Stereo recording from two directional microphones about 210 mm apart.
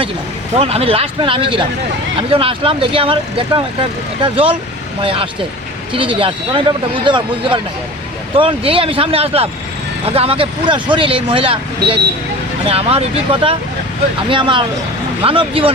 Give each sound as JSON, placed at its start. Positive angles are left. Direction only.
{"t": 0.5, "sound": "speech", "side_deg": -30}